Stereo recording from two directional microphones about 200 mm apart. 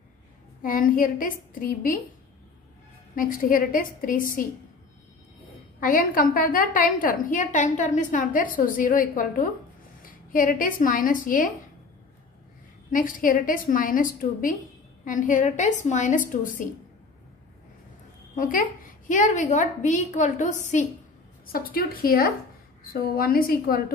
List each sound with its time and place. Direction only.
0.6 s a woman's voice: 45° left (ahead or behind)
3.2 s a woman's voice: 45° left (ahead or behind)
5.8 s a woman's voice: 45° left (ahead or behind)
12.9 s a woman's voice: 45° left (ahead or behind)
18.3 s a woman's voice: 40° left (ahead or behind)